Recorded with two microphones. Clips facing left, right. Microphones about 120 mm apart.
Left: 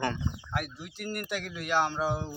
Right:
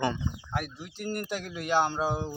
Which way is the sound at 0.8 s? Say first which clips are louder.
Right 2 dB; 30° right (ahead or behind).